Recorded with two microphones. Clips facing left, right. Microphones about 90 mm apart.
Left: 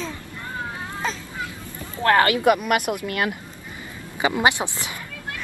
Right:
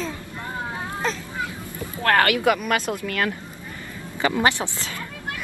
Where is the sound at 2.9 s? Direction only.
15° left (ahead or behind).